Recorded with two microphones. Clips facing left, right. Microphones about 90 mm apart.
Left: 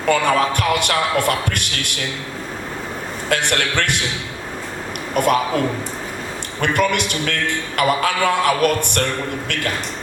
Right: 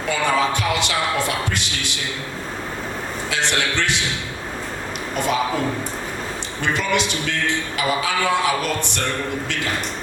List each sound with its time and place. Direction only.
0.1 s a man's voice: 55° left (ahead or behind)
3.2 s a man's voice: 55° left (ahead or behind)
5.1 s a man's voice: 55° left (ahead or behind)
6.6 s a man's voice: 55° left (ahead or behind)